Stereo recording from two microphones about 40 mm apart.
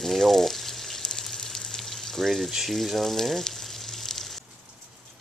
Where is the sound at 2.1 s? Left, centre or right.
Centre.